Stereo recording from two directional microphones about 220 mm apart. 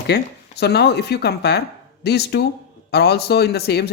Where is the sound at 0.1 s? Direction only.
50° left (ahead or behind).